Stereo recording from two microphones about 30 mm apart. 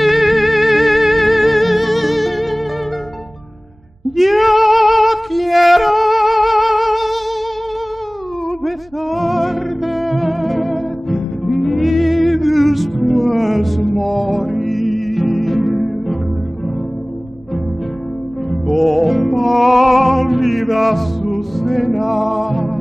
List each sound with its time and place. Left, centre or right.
0.0 s music: centre
4.2 s music: centre
8.6 s music: centre
18.7 s music: centre